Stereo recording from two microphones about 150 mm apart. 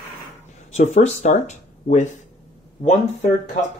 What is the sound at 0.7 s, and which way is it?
Speech, 50° left (ahead or behind).